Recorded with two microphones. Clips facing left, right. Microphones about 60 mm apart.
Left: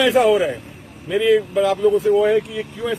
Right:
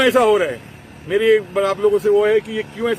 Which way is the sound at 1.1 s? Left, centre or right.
Right.